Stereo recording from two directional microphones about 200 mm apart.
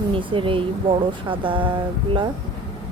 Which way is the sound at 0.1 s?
25° right (ahead or behind).